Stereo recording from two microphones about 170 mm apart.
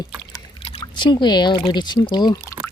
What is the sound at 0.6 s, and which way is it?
Speech, 35° left (ahead or behind).